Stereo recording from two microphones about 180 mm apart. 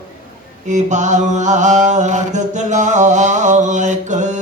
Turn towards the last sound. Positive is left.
turn(degrees=-40)  # may be behind; listen again after turning